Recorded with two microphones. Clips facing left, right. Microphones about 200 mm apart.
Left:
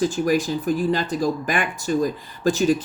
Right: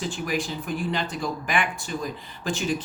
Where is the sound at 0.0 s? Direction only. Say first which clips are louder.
Left 8 dB; 40° left (ahead or behind).